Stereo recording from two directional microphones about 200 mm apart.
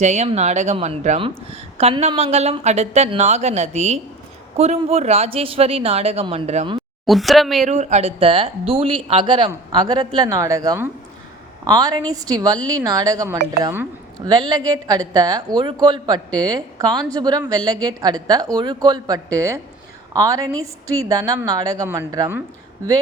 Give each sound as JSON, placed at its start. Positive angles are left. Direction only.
{"t": 0.0, "sound": "a woman's voice", "side_deg": -35}
{"t": 7.0, "sound": "speech", "side_deg": 0}
{"t": 7.7, "sound": "a woman's voice", "side_deg": -35}